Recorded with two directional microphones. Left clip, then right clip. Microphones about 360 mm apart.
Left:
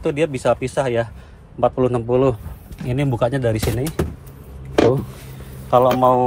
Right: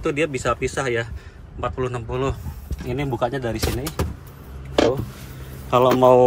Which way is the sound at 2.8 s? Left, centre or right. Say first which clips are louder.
Left 3 dB; left.